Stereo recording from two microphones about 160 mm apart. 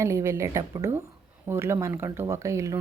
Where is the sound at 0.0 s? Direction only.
20° right (ahead or behind).